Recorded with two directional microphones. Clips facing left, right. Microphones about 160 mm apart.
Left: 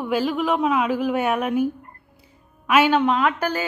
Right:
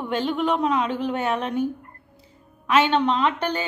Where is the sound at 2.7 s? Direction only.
10° left (ahead or behind).